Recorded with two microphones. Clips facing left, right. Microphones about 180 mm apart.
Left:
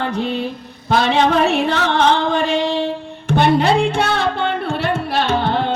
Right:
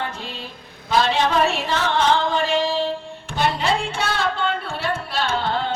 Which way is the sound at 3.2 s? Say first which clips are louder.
Left 8 dB; 60° left (ahead or behind).